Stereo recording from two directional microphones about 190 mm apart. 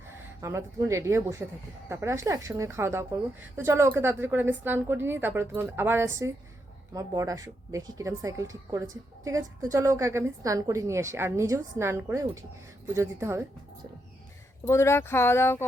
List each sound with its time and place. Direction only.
0.1 s speech: 15° right (ahead or behind)
14.7 s speech: 15° left (ahead or behind)